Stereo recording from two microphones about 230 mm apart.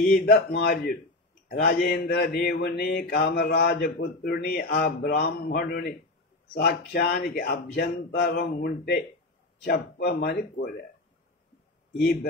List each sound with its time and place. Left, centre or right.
0.1 s mantra: left
10.5 s speech: left
12.0 s speech: left